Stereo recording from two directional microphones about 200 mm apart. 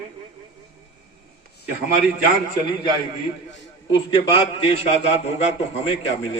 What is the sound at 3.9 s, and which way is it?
A man's voice, 25° left (ahead or behind).